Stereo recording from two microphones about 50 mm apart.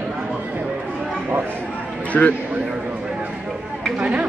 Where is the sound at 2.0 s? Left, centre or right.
Left.